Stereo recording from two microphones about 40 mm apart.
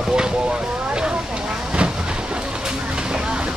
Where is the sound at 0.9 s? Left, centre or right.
Right.